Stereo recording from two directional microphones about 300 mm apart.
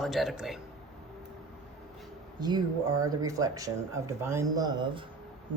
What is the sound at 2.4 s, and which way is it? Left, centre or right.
Speech, centre.